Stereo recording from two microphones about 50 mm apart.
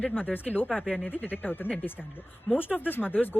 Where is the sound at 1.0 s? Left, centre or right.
Left.